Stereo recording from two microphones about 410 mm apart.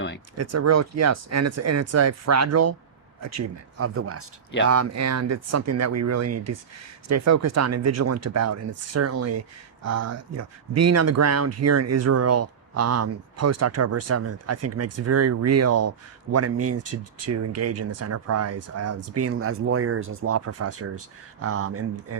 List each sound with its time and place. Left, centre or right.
0.3 s speech: right